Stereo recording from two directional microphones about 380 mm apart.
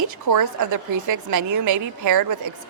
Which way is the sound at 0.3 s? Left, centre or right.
Right.